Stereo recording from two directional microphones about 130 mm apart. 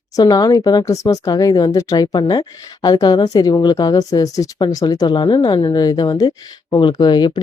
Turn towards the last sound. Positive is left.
turn(degrees=35)  # may be behind; listen again after turning